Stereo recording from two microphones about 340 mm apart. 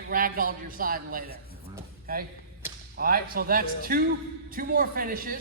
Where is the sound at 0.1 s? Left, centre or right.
Right.